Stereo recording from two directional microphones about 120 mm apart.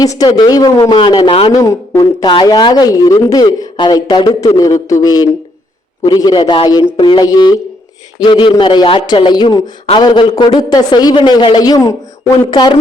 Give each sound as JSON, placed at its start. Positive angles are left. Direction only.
{"t": 0.0, "sound": "speech", "side_deg": 35}
{"t": 1.3, "sound": "a man's voice", "side_deg": 50}
{"t": 1.5, "sound": "speech", "side_deg": 30}